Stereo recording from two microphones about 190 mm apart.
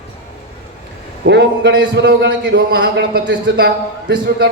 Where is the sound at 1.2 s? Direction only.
65° right (ahead or behind).